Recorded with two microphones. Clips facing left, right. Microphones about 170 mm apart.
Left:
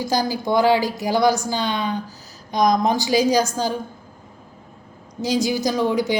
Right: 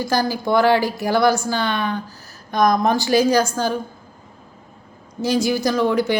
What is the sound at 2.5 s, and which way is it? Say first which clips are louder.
Speech: right 1 dB; 55° right (ahead or behind).